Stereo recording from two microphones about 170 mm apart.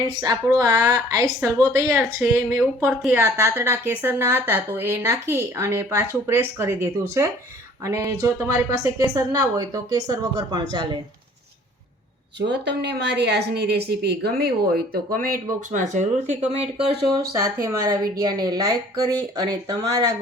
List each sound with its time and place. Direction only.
0.1 s a woman's voice: 25° right (ahead or behind)
12.5 s a woman's voice: 85° right; by 15.4 s 55° right (ahead or behind)
15.7 s speech: 45° right (ahead or behind)
17.4 s a woman's voice: 20° right (ahead or behind)